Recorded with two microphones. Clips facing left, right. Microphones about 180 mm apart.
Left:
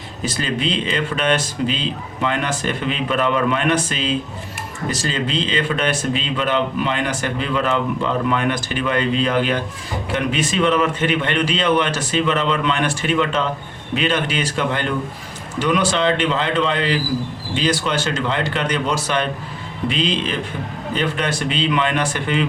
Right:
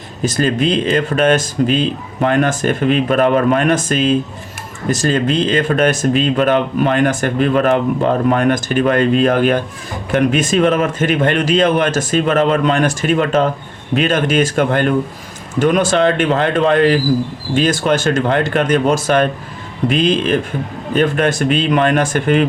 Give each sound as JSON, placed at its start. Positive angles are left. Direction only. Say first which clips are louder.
{"t": 0.3, "sound": "speech", "louder": "right 7 dB", "side_deg": -45}